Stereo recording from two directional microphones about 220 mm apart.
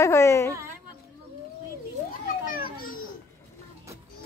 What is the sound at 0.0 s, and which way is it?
Speech, 15° left (ahead or behind).